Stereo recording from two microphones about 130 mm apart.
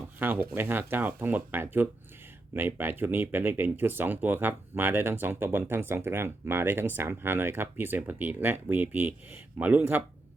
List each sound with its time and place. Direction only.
0.2 s speech: 15° right (ahead or behind)